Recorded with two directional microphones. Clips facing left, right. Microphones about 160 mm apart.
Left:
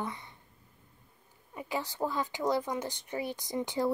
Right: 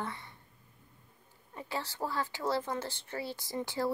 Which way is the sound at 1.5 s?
15° left (ahead or behind).